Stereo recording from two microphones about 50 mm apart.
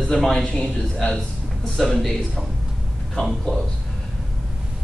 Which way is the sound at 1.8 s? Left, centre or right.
Centre.